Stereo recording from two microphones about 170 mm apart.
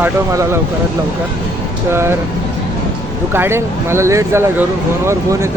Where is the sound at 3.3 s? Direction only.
15° right (ahead or behind).